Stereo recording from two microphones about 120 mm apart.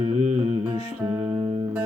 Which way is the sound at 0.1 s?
85° right.